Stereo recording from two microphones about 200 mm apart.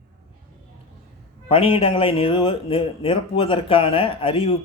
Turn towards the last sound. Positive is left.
turn(degrees=25)  # may be behind; listen again after turning